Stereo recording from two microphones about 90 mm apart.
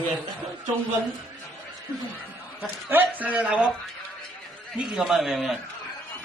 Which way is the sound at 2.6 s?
20° right (ahead or behind).